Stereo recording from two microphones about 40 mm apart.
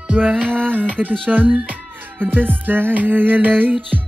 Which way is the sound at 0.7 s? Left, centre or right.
Right.